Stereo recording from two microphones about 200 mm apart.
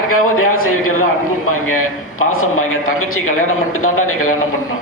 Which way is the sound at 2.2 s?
90° left.